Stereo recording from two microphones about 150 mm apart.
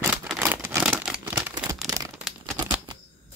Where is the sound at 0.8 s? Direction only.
5° right (ahead or behind).